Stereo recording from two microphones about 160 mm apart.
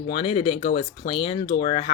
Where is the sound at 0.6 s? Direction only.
70° left (ahead or behind).